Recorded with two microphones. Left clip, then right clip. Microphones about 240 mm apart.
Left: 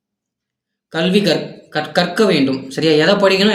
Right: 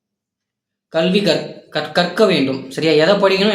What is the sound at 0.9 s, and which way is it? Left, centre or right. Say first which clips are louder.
Speech: even; centre.